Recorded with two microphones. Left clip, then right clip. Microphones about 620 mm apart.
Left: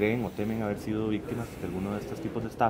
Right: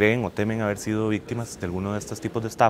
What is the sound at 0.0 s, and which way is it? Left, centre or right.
Speech, right.